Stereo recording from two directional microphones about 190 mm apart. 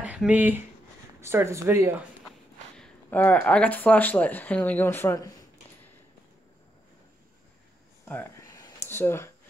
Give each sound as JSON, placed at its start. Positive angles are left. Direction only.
{"t": 0.0, "sound": "speech", "side_deg": -5}
{"t": 2.8, "sound": "speech", "side_deg": 10}
{"t": 8.0, "sound": "a sound", "side_deg": 10}